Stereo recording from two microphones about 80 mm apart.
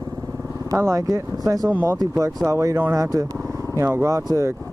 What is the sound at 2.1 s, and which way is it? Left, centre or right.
Speech, right.